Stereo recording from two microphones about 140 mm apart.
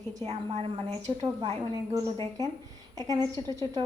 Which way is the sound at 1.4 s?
35° right (ahead or behind).